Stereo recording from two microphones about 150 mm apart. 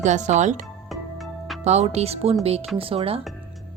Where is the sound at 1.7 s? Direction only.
45° right (ahead or behind).